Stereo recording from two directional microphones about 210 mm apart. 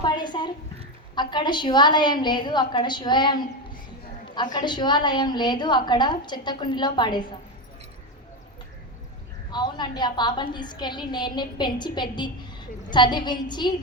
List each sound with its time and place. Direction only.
0.0 s a sound: 20° left (ahead or behind)
1.1 s a woman's voice: 20° left (ahead or behind)
9.5 s a woman's voice: 20° left (ahead or behind)